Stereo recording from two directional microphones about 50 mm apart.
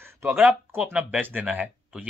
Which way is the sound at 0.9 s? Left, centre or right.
Right.